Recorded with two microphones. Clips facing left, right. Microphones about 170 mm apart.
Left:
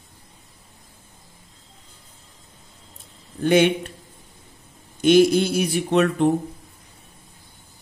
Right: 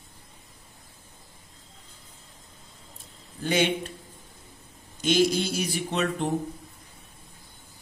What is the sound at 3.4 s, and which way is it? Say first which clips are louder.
Speech: left 8 dB; 60° left (ahead or behind).